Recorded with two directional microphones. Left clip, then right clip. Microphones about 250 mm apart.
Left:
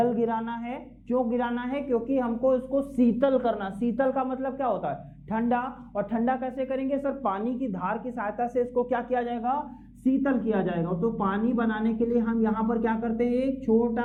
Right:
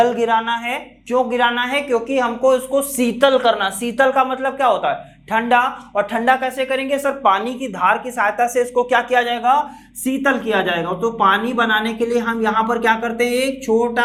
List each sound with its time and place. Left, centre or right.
0.0 s speech: centre